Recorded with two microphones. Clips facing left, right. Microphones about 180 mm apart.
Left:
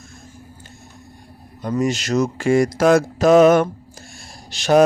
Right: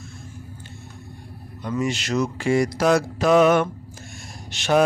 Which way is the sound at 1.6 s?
40° left (ahead or behind).